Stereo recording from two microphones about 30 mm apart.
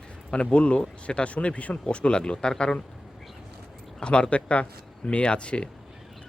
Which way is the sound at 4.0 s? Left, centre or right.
Left.